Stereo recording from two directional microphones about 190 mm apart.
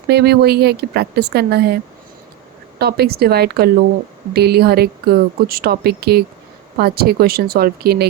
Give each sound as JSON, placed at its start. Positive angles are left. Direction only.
{"t": 0.1, "sound": "speech", "side_deg": -60}